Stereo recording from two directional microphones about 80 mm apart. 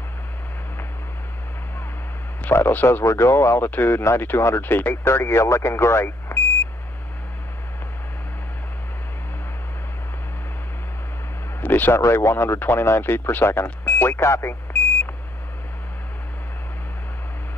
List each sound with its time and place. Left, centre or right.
2.5 s speech: left
11.6 s a sound: left
12.0 s speech: left